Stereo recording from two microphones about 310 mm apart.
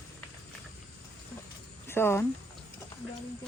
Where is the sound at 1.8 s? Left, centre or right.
Centre.